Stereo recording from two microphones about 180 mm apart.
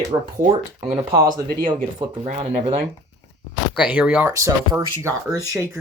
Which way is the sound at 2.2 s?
35° right (ahead or behind).